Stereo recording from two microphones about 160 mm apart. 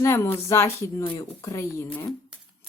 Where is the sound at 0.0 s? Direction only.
15° left (ahead or behind).